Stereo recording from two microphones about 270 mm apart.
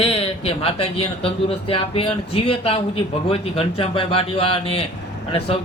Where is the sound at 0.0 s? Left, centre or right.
Left.